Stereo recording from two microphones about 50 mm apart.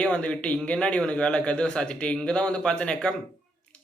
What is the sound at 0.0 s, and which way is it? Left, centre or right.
Speech, left.